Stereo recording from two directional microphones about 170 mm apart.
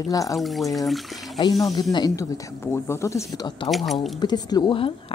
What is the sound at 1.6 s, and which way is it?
Speech, 20° left (ahead or behind).